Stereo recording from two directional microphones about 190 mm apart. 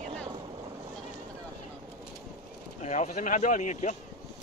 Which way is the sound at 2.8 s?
40° left (ahead or behind).